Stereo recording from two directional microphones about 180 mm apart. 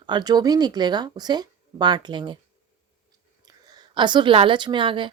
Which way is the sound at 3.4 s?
20° right (ahead or behind).